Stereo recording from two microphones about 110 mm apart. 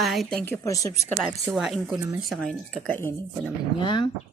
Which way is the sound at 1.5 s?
5° right (ahead or behind).